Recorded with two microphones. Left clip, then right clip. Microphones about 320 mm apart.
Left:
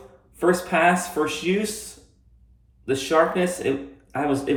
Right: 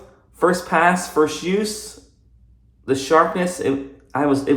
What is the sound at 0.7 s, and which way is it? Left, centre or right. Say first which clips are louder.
Speech: right 3 dB; right.